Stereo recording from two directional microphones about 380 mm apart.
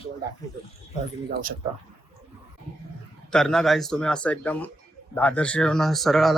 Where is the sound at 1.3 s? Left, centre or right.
Right.